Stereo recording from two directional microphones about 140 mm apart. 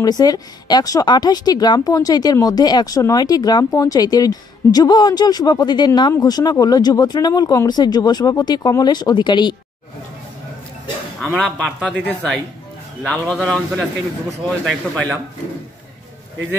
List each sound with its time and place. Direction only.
0.0 s speech: 25° left (ahead or behind)
11.1 s speech: centre (ahead or behind)